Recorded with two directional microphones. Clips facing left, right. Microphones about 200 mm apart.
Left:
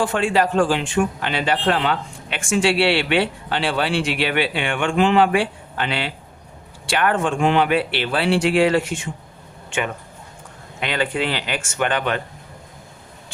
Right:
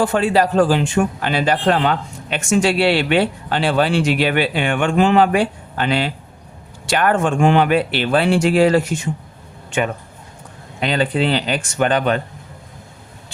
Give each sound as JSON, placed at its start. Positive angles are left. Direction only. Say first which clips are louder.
{"t": 0.0, "sound": "a man's voice", "louder": "right 3 dB", "side_deg": -40}
{"t": 10.8, "sound": "speech", "louder": "right 4 dB", "side_deg": -35}